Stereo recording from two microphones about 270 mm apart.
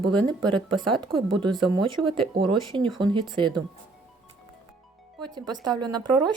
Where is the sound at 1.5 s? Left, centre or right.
Centre.